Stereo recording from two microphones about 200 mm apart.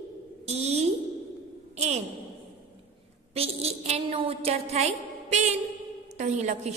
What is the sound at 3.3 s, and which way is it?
A woman's voice, 30° right (ahead or behind).